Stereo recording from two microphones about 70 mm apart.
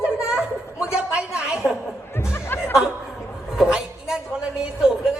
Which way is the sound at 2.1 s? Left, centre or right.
Left.